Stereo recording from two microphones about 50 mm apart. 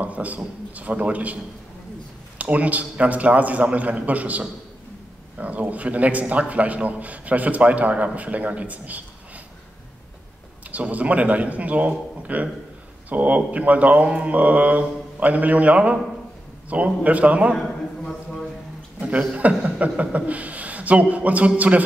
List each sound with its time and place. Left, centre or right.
0.0 s a man's voice: right
10.7 s a man's voice: right
17.6 s a sound: centre
18.9 s a man's voice: right